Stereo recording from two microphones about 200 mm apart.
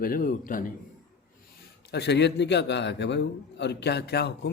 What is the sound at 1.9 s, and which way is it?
A man's voice, 55° left (ahead or behind).